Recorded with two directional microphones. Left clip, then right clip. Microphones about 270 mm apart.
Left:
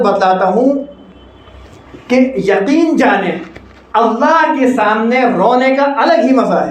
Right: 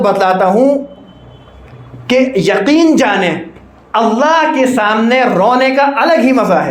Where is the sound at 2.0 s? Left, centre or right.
Right.